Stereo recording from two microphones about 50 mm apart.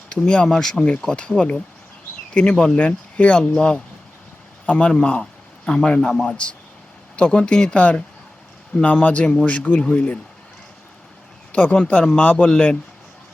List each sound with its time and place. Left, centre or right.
0.1 s speech: centre
1.0 s speech: left
2.7 s speech: left
9.5 s speech: left
11.5 s speech: left